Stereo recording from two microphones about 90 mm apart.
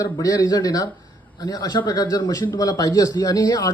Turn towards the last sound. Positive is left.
turn(degrees=40)  # may be behind; listen again after turning